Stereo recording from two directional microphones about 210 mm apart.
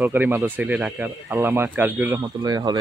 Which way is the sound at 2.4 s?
20° right (ahead or behind).